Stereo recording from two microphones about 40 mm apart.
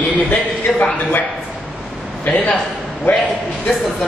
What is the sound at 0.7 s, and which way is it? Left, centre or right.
Speech, centre.